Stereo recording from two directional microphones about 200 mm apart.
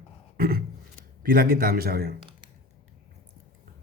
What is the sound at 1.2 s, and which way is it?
Speech, 45° right (ahead or behind).